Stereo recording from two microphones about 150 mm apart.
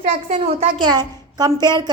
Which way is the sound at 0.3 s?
45° right (ahead or behind).